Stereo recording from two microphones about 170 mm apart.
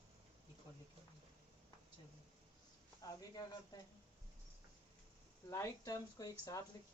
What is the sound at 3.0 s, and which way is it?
Speech, 20° left (ahead or behind).